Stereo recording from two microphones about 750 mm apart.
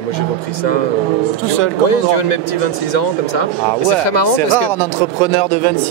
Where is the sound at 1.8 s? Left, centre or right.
Left.